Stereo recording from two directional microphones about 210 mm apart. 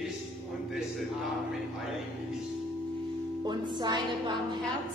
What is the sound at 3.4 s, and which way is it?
Speech, 20° right (ahead or behind).